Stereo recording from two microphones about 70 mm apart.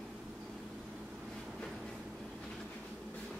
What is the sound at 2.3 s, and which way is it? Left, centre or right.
Train, centre.